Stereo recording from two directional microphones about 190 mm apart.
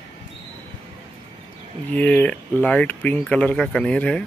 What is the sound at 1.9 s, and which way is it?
Speech, 5° left (ahead or behind).